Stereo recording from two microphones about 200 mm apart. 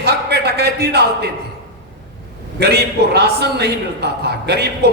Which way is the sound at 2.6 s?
55° right (ahead or behind).